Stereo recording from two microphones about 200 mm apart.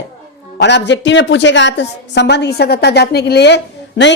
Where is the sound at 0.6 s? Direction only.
60° left (ahead or behind).